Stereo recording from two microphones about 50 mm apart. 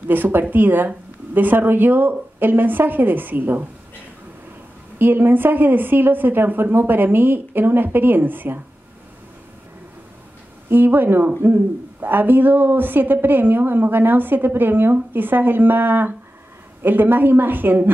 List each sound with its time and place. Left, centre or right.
0.1 s speech: right
4.9 s a woman's voice: right
10.7 s a woman's voice: right